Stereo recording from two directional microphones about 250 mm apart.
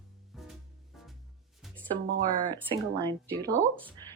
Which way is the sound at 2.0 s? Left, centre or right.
Right.